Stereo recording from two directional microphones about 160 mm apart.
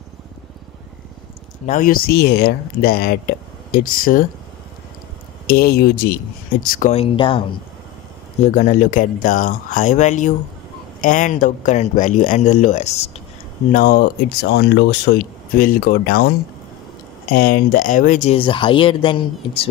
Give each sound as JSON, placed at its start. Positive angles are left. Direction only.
{"t": 1.7, "sound": "speech", "side_deg": 60}
{"t": 5.5, "sound": "speech", "side_deg": 75}
{"t": 6.9, "sound": "speech", "side_deg": 35}
{"t": 8.5, "sound": "speech", "side_deg": 55}
{"t": 13.7, "sound": "speech", "side_deg": 60}
{"t": 17.3, "sound": "speech", "side_deg": 65}
{"t": 18.4, "sound": "speech", "side_deg": 30}